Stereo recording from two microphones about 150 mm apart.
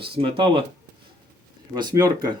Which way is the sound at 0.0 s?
35° right (ahead or behind).